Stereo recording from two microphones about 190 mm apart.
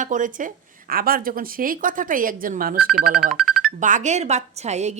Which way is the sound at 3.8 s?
40° right (ahead or behind).